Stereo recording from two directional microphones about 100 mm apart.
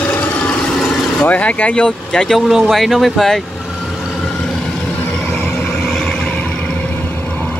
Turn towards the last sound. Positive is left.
turn(degrees=15)  # may be behind; listen again after turning